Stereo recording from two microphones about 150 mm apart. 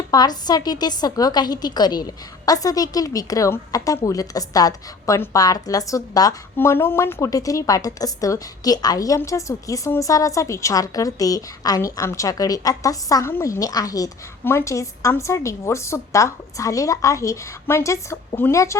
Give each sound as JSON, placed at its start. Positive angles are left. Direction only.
{"t": 0.1, "sound": "a woman's voice", "side_deg": 25}